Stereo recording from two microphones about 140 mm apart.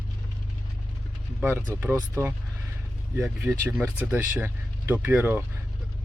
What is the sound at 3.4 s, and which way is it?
Speech, 10° right (ahead or behind).